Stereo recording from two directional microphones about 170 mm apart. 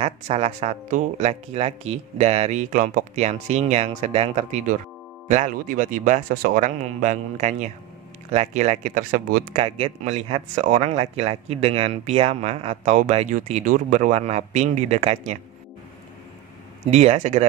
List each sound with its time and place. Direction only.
0.0 s speech: 40° right (ahead or behind)
10.0 s speech: 35° right (ahead or behind)
16.9 s speech: 40° right (ahead or behind)